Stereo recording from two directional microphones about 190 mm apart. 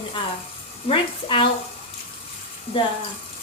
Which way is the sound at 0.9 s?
25° left (ahead or behind).